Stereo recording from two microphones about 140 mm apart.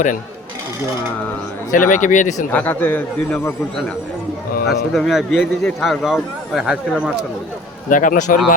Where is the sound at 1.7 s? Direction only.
70° left (ahead or behind).